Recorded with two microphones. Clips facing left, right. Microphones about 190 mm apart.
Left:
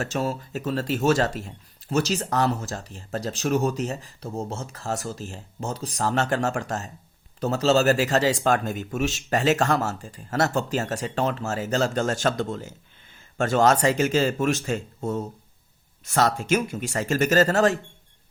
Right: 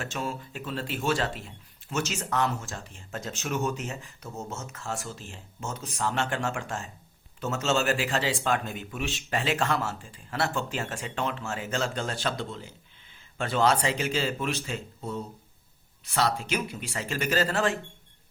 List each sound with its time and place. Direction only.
0.0 s speech: 40° left (ahead or behind)